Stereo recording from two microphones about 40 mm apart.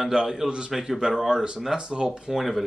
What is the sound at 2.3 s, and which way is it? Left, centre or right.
Speech, centre.